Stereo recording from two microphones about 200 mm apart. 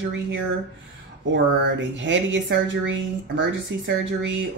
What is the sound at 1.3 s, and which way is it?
Speech, 65° right (ahead or behind).